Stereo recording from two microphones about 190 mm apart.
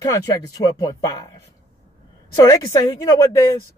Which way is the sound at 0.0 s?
20° left (ahead or behind).